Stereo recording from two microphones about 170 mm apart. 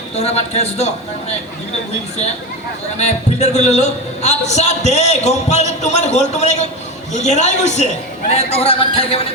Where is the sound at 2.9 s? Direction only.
40° left (ahead or behind).